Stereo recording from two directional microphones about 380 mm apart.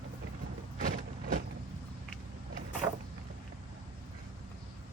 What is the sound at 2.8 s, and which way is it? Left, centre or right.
Vehicle, centre.